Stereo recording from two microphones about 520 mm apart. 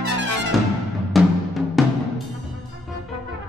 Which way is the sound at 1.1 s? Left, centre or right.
Centre.